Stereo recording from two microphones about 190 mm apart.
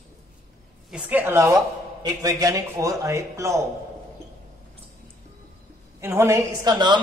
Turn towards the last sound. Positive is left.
turn(degrees=-25)  # may be behind; listen again after turning